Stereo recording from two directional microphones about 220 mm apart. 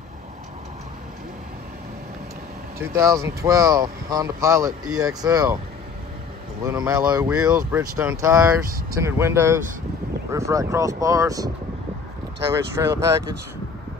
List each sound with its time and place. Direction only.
2.8 s speech: 10° right (ahead or behind)
6.6 s speech: 15° right (ahead or behind)
12.7 s speech: 15° right (ahead or behind)